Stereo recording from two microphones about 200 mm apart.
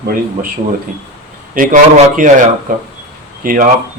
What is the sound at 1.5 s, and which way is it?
Speech, 40° right (ahead or behind).